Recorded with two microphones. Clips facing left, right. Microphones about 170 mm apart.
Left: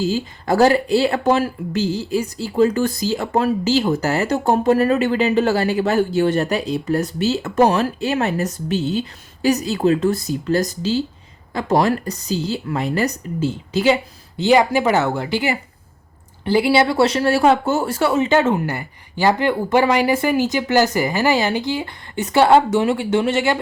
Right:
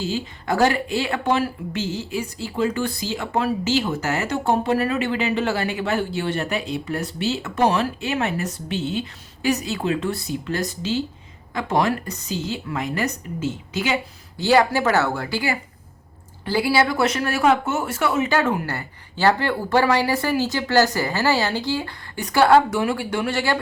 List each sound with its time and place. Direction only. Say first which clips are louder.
0.0 s speech: left 5 dB; 40° left (ahead or behind)
14.3 s speech: left 3 dB; 20° left (ahead or behind)